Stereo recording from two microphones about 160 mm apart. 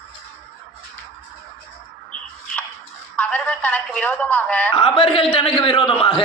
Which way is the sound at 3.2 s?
10° left (ahead or behind).